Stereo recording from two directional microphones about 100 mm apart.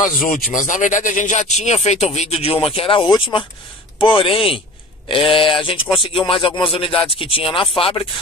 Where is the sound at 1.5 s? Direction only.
90° left; by 3.1 s 65° left (ahead or behind).